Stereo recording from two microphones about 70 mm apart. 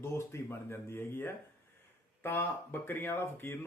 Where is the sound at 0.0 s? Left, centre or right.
Left.